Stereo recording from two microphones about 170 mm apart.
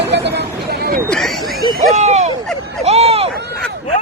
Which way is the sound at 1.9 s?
40° right (ahead or behind).